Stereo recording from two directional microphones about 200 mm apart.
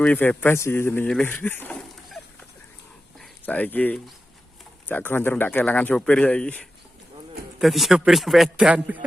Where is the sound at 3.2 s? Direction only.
10° left (ahead or behind).